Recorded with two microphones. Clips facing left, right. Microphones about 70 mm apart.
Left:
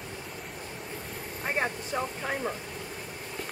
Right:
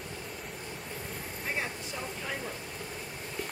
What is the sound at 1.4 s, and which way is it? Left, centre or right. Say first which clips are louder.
Vehicle: left 6 dB; left.